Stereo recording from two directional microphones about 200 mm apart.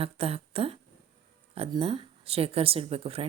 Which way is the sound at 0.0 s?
30° right (ahead or behind).